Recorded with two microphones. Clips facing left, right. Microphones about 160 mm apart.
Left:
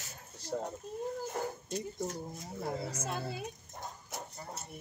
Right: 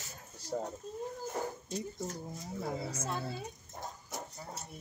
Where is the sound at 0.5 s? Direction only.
15° right (ahead or behind).